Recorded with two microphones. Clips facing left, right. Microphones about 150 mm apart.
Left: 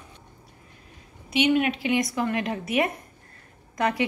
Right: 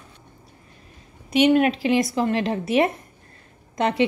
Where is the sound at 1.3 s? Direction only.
40° right (ahead or behind).